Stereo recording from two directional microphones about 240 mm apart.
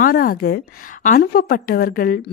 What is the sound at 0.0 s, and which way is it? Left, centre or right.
A woman's voice, left.